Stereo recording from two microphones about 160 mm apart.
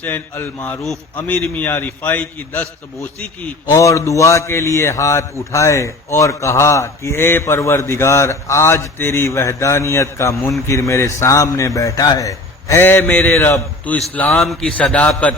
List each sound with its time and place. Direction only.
0.0 s a man's voice: 10° left (ahead or behind)
3.7 s a man's voice: 20° left (ahead or behind)